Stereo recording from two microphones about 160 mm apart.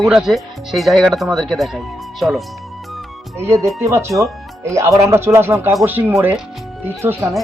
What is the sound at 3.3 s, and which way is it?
Speech, 15° right (ahead or behind).